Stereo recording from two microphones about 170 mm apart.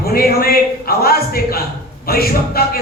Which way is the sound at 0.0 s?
60° left (ahead or behind).